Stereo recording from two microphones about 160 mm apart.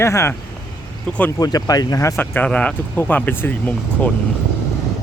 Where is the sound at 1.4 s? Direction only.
25° left (ahead or behind).